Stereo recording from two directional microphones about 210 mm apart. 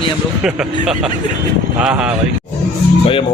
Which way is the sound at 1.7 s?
5° right (ahead or behind).